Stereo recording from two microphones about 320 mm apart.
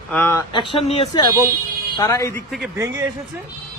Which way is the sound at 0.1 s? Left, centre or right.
Centre.